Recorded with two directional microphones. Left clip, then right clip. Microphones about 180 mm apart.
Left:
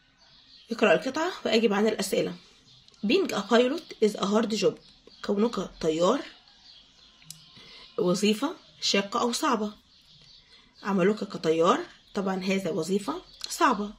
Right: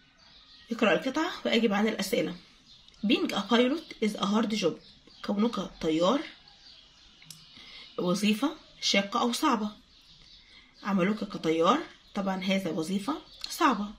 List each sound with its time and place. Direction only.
0.7 s speech: 35° left (ahead or behind)
7.9 s speech: 35° left (ahead or behind)
10.8 s speech: 35° left (ahead or behind)